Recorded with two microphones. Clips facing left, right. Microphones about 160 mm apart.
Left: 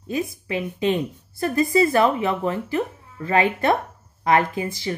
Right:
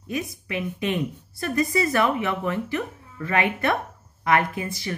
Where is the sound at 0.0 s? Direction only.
30° left (ahead or behind).